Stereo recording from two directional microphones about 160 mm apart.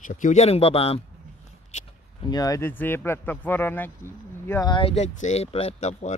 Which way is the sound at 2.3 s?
20° left (ahead or behind).